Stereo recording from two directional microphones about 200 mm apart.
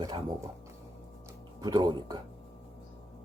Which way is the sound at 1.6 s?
20° right (ahead or behind).